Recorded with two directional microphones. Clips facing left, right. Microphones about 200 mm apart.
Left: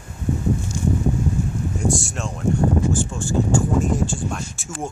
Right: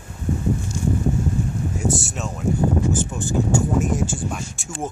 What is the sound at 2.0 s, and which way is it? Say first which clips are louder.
Speech: even; centre (ahead or behind).